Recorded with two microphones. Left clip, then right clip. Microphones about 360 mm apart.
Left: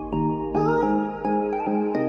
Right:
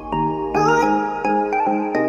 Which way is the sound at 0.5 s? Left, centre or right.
Right.